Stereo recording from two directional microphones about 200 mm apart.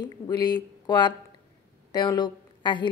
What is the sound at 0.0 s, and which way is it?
A woman's voice, 20° left (ahead or behind).